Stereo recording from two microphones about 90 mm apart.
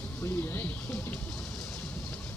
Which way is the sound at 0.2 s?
25° left (ahead or behind).